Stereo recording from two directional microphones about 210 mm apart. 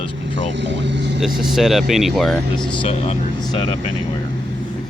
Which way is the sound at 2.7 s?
25° left (ahead or behind).